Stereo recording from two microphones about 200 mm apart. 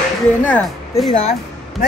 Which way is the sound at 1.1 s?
35° left (ahead or behind).